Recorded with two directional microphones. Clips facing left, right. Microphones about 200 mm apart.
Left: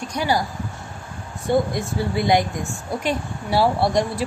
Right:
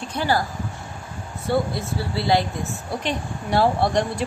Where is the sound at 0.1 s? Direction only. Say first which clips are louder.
Even; 15° left (ahead or behind).